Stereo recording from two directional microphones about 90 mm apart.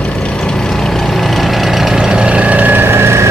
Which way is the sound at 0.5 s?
5° left (ahead or behind).